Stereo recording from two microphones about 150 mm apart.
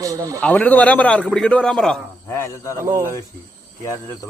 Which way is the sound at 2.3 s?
20° left (ahead or behind).